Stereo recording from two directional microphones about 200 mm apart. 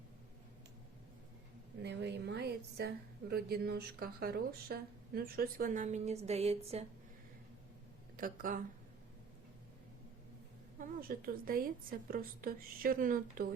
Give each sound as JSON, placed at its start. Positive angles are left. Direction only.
{"t": 1.8, "sound": "a woman's voice", "side_deg": -60}
{"t": 8.1, "sound": "speech", "side_deg": -45}
{"t": 10.8, "sound": "a woman's voice", "side_deg": -45}